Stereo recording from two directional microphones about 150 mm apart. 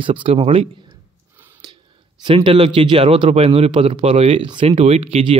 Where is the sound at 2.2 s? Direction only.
35° right (ahead or behind).